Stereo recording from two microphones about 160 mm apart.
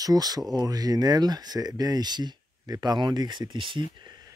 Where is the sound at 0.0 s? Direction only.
25° right (ahead or behind).